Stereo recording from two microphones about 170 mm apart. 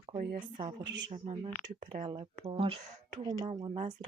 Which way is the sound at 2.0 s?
30° right (ahead or behind).